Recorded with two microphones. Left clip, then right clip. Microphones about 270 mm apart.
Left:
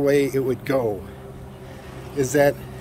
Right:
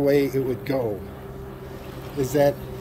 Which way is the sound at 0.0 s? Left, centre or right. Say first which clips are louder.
Left 1 dB; centre.